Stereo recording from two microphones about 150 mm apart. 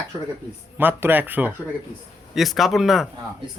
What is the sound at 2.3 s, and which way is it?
Speech, centre (ahead or behind).